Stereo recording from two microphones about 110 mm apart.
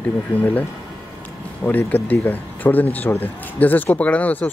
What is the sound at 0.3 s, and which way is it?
Speech, 15° left (ahead or behind).